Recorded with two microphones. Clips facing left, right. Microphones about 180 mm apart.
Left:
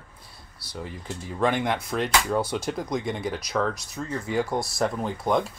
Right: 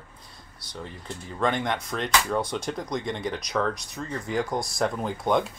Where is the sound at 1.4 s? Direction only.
5° left (ahead or behind).